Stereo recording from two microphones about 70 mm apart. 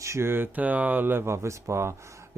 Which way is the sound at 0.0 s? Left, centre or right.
Right.